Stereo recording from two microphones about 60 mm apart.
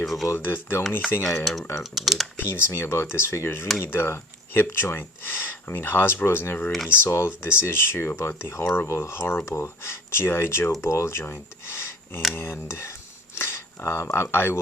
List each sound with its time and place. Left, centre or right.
0.0 s speech: centre
0.3 s speech: left
1.5 s speech: centre
2.3 s speech: left